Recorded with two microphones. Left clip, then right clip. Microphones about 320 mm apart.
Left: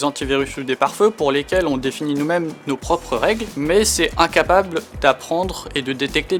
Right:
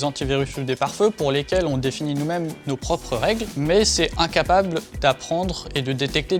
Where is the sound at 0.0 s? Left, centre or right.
Right.